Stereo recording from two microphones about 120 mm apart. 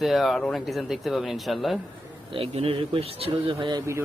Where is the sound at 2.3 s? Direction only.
50° right (ahead or behind).